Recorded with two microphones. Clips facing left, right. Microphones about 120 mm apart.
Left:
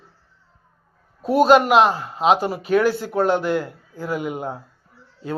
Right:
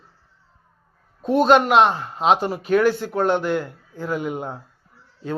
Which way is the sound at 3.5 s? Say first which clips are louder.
Left 1 dB; 40° left (ahead or behind).